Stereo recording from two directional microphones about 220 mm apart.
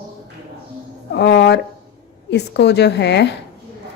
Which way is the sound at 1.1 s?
55° left (ahead or behind).